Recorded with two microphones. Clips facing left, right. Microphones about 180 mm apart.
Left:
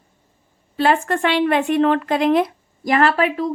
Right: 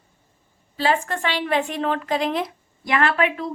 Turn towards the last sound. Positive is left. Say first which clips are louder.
# left 4 dB
turn(degrees=35)  # may be behind; listen again after turning